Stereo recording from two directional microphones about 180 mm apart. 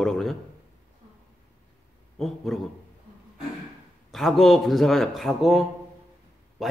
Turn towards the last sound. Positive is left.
turn(degrees=0)  # may be behind; listen again after turning